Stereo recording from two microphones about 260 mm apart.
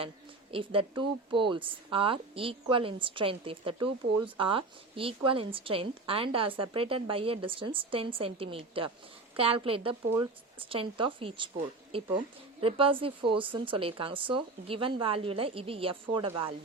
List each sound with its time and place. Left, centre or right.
0.5 s speech: centre